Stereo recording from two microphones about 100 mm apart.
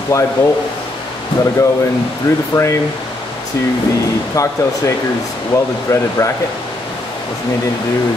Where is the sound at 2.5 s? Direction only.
30° left (ahead or behind).